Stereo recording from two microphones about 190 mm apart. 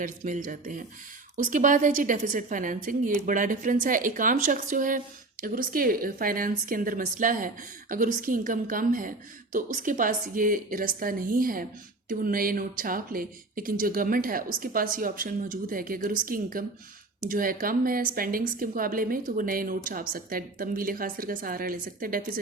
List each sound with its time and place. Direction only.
0.0 s speech: 45° right (ahead or behind)